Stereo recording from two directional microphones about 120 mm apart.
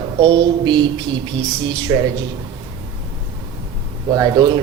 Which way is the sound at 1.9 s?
20° right (ahead or behind).